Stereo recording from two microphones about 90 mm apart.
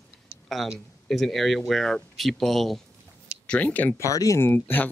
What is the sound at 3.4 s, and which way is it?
Speech, 15° left (ahead or behind).